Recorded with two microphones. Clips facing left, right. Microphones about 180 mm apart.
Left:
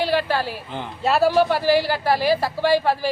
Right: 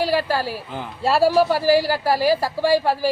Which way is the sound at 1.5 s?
40° right (ahead or behind).